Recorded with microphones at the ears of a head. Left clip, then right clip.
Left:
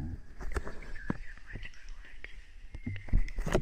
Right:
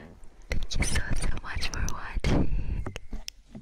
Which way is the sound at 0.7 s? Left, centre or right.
Right.